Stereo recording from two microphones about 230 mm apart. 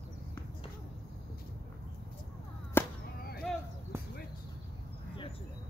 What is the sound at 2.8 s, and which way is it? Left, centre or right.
Whip, centre.